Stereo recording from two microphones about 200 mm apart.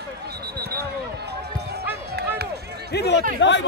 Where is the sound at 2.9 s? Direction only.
55° left (ahead or behind).